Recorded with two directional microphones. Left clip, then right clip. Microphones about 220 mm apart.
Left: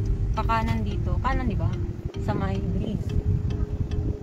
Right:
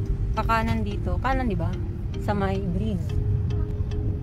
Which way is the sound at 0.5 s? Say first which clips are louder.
Right 2 dB; 30° right (ahead or behind).